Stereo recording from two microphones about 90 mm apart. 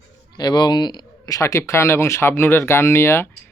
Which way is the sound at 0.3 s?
50° left (ahead or behind).